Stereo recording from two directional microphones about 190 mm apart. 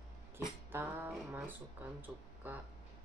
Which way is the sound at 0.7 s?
10° right (ahead or behind).